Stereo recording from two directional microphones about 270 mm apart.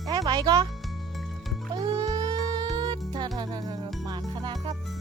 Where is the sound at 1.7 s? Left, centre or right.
Centre.